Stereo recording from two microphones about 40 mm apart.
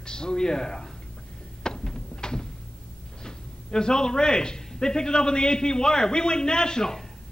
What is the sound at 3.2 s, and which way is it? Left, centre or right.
A man's voice, centre.